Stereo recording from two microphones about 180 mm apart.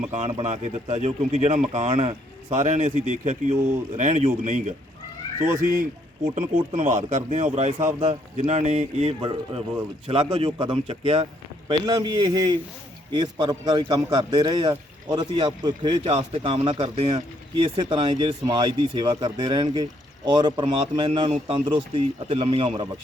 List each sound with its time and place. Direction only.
0.1 s speech: 40° right (ahead or behind)
7.8 s speech: 15° right (ahead or behind)
8.0 s speech: 40° right (ahead or behind)
10.4 s speech: 25° right (ahead or behind)